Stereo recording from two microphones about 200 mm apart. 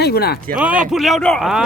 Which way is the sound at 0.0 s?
50° left (ahead or behind).